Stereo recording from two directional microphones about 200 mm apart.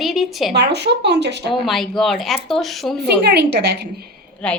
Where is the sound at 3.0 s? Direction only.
55° right (ahead or behind).